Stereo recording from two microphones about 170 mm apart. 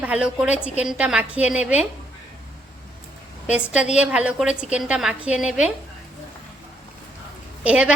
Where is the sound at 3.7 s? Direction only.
5° right (ahead or behind).